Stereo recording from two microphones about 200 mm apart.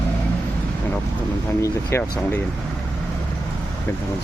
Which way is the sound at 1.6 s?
10° left (ahead or behind).